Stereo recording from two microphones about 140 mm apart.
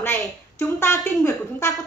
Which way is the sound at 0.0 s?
15° left (ahead or behind).